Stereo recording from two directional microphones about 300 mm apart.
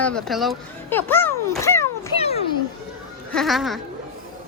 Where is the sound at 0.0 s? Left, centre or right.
Centre.